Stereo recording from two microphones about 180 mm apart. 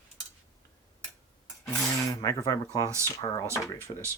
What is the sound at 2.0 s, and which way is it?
Speech, 20° left (ahead or behind).